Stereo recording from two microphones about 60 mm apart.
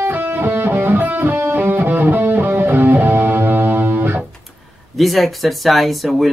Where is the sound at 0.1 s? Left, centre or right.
Right.